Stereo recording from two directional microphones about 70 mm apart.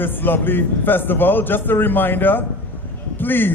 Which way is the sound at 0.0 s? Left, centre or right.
Left.